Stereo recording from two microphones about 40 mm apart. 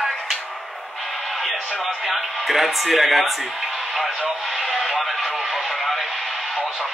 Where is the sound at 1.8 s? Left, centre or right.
Centre.